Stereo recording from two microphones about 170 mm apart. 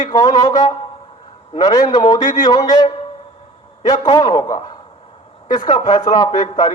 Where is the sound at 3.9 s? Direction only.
25° left (ahead or behind).